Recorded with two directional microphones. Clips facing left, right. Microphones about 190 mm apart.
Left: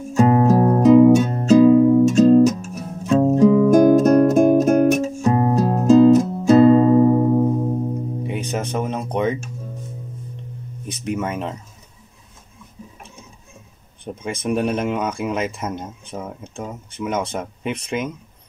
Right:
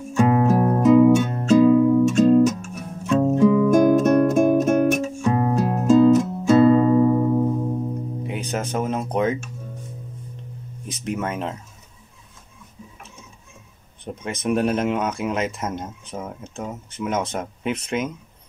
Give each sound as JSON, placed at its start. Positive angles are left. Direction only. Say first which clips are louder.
{"t": 0.1, "sound": "music", "louder": "left 3 dB", "side_deg": 35}
{"t": 8.3, "sound": "speech", "louder": "left 1 dB", "side_deg": 0}
{"t": 10.9, "sound": "speech", "louder": "left 2 dB", "side_deg": 0}
{"t": 14.2, "sound": "speech", "louder": "even", "side_deg": 0}